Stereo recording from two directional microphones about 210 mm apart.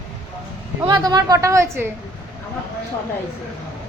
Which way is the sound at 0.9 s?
20° right (ahead or behind).